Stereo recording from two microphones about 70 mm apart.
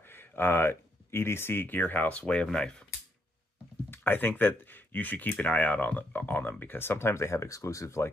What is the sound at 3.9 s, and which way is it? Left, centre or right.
Speech, left.